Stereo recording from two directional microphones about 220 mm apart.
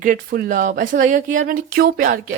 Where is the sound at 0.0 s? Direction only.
40° right (ahead or behind).